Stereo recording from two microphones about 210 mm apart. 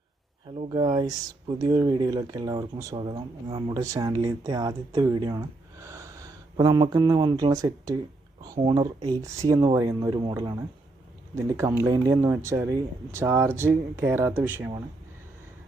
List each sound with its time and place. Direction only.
0.5 s speech: 25° right (ahead or behind); by 14.7 s 10° right (ahead or behind)